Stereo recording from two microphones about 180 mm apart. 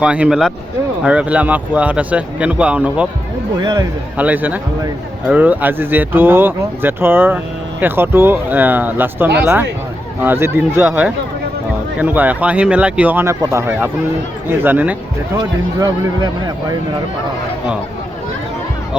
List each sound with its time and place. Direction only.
0.0 s speech: 5° right (ahead or behind)
3.6 s speech: 25° right (ahead or behind)
4.2 s speech: 10° right (ahead or behind)
15.4 s speech: 20° right (ahead or behind)